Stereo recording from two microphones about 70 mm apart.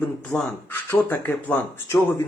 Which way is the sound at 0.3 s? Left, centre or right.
Left.